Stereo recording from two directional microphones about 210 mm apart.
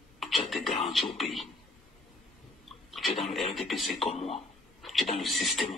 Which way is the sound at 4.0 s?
30° left (ahead or behind).